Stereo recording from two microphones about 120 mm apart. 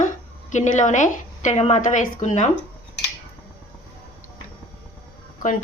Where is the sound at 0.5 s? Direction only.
85° left.